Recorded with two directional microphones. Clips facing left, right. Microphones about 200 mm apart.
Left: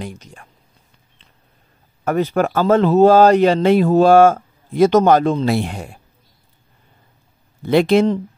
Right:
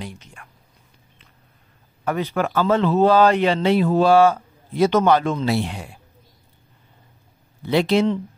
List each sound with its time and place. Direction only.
0.0 s speech: 40° left (ahead or behind)
2.0 s speech: 45° left (ahead or behind)
7.6 s speech: 50° left (ahead or behind)